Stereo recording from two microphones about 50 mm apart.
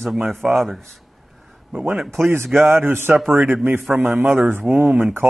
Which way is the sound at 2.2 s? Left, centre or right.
Right.